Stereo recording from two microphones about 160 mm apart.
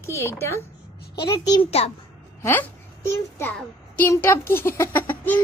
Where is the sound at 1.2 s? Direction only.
25° left (ahead or behind).